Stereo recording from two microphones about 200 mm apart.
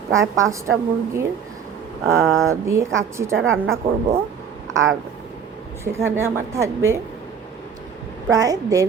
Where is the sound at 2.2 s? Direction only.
Centre (ahead or behind).